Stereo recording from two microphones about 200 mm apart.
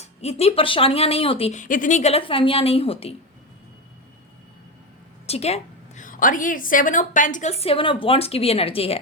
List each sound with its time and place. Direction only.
0.0 s speech: 30° left (ahead or behind)
5.2 s a woman's voice: 30° left (ahead or behind)